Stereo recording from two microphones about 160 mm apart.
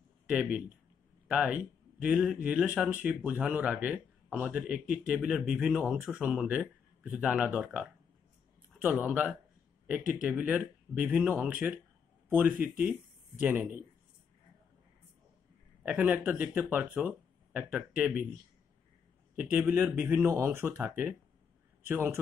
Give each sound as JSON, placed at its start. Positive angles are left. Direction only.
{"t": 1.2, "sound": "speech", "side_deg": -5}
{"t": 9.9, "sound": "speech", "side_deg": -55}
{"t": 10.2, "sound": "speech", "side_deg": -10}
{"t": 15.8, "sound": "speech", "side_deg": -10}
{"t": 19.3, "sound": "speech", "side_deg": -10}
{"t": 21.8, "sound": "speech", "side_deg": -15}